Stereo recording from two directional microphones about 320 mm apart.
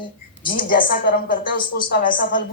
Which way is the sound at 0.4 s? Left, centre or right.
Left.